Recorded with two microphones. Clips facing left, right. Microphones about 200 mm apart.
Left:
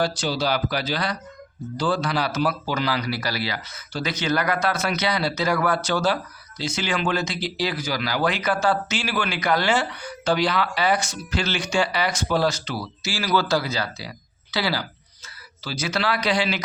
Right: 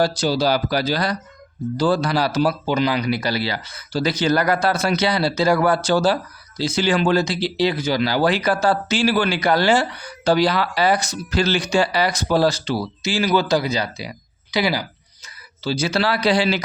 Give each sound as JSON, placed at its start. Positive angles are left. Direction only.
{"t": 0.0, "sound": "a man's voice", "side_deg": -40}
{"t": 15.6, "sound": "a man's voice", "side_deg": -30}